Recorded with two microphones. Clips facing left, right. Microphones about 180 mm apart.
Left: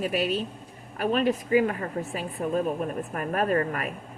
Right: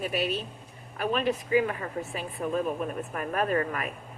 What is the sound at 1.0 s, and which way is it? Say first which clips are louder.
A woman's voice: left 3 dB; 40° left (ahead or behind).